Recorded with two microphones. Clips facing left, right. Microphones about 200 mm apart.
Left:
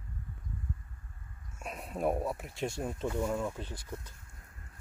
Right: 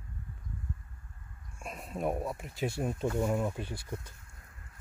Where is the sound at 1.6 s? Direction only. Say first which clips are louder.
Left 1 dB; centre (ahead or behind).